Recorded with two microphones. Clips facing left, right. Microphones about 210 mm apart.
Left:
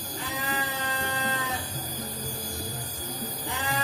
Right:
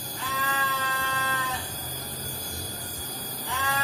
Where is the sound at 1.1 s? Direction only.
15° left (ahead or behind).